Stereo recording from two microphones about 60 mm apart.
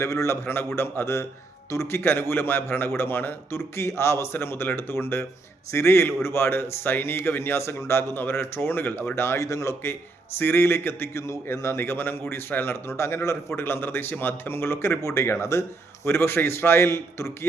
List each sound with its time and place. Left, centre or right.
0.0 s speech: left
0.4 s a man's voice: left
9.1 s a man's voice: left
9.4 s speech: left
9.8 s a man's voice: left
15.0 s speech: left
16.0 s a man's voice: left